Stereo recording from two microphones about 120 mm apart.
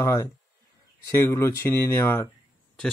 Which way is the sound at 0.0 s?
25° left (ahead or behind).